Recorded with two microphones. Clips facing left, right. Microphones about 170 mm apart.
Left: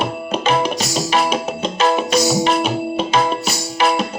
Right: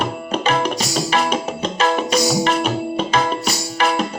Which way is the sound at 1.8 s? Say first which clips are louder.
Left 2 dB; 5° left (ahead or behind).